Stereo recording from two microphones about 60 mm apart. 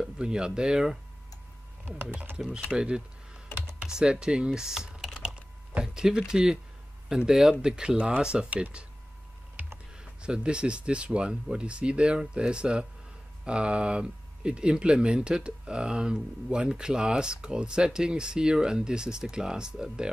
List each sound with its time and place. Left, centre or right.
0.0 s speech: centre
1.9 s speech: right
2.7 s speech: centre
10.2 s speech: centre